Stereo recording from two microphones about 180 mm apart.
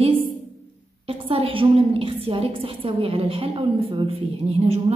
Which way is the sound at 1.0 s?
30° right (ahead or behind).